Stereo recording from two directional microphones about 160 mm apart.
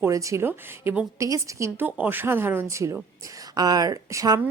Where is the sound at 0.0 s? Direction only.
20° right (ahead or behind).